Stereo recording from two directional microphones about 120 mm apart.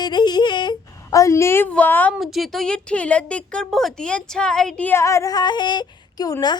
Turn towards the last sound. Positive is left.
turn(degrees=35)  # may be behind; listen again after turning